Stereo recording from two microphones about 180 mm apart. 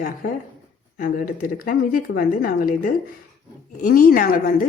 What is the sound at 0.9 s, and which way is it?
A woman's voice, 50° left (ahead or behind).